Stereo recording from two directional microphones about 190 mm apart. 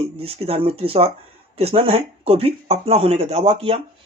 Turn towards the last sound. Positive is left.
turn(degrees=-30)  # may be behind; listen again after turning